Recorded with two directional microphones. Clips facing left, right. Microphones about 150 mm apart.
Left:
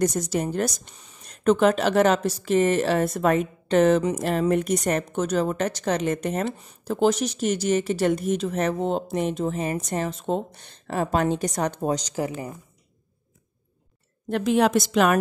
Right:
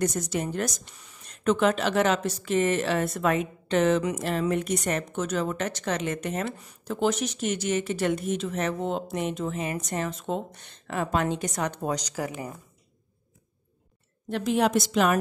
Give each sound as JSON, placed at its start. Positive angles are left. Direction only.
{"t": 0.0, "sound": "speech", "side_deg": 35}
{"t": 14.3, "sound": "a woman's voice", "side_deg": 75}